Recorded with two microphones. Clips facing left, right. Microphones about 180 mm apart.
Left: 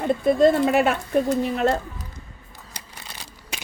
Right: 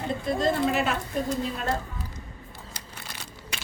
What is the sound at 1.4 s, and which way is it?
Speech, 70° left (ahead or behind).